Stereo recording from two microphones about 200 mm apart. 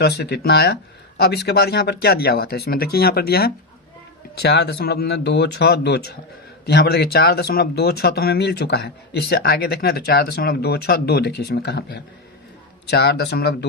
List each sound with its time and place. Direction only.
0.0 s speech: 55° left (ahead or behind)